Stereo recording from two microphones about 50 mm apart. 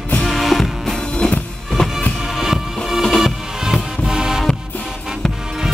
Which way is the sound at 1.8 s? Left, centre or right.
Centre.